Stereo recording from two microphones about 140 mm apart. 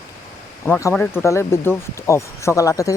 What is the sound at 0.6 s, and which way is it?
Speech, 15° left (ahead or behind).